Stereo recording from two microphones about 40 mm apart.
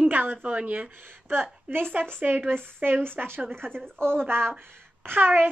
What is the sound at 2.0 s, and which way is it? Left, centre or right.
Speech, right.